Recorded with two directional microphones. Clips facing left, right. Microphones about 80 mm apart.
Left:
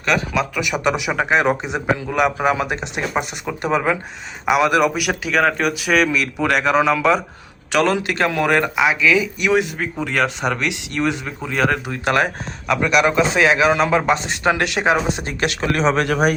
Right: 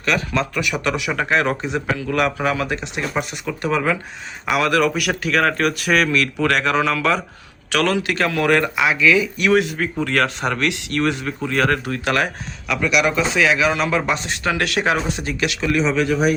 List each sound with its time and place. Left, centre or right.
0.0 s a man's voice: centre
12.0 s speech: left
12.6 s a man's voice: left; by 15.0 s centre
15.1 s speech: left